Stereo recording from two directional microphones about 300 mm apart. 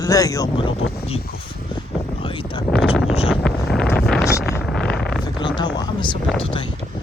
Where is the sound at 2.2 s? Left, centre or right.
Centre.